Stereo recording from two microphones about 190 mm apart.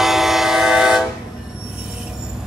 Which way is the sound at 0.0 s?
Centre (ahead or behind).